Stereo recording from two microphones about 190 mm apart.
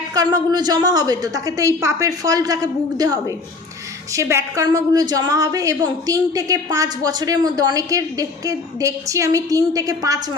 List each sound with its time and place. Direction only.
0.1 s a woman's voice: 20° right (ahead or behind)